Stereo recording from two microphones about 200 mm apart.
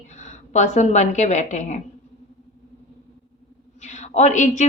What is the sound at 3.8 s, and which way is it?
Speech, 35° left (ahead or behind).